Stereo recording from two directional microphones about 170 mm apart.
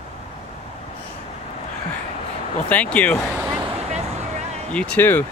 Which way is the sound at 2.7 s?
10° left (ahead or behind).